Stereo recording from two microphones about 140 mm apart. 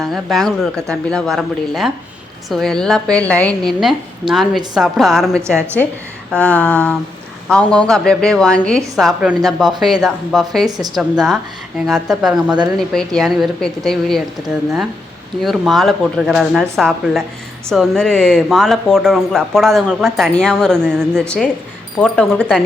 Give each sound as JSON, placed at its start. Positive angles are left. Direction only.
{"t": 0.0, "sound": "a woman's voice", "side_deg": 0}
{"t": 5.3, "sound": "a woman's voice", "side_deg": -20}
{"t": 5.5, "sound": "a sound", "side_deg": 10}
{"t": 7.4, "sound": "a woman's voice", "side_deg": 5}
{"t": 10.7, "sound": "a woman's voice", "side_deg": -30}
{"t": 10.9, "sound": "a woman's voice", "side_deg": 0}